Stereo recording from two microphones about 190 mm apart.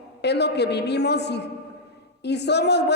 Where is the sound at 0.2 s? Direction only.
60° left (ahead or behind).